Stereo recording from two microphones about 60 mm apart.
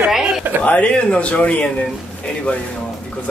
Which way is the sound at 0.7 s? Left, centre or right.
Left.